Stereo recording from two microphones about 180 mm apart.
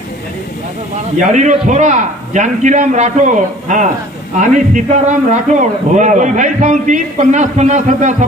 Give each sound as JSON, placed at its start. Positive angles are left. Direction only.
{"t": 1.3, "sound": "a man's voice", "side_deg": -40}